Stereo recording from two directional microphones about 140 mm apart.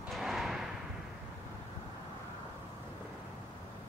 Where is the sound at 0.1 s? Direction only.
Centre (ahead or behind).